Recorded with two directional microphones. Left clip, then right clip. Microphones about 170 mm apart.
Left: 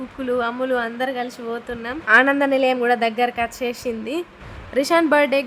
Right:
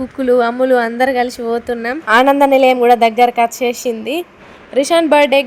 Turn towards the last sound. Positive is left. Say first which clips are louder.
# right 6 dB
turn(degrees=-10)  # may be behind; listen again after turning